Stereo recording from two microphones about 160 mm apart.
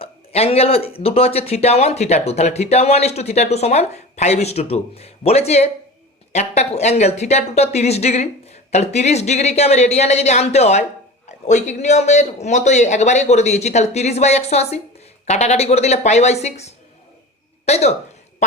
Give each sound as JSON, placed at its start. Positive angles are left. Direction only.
{"t": 0.0, "sound": "a man's voice", "side_deg": 40}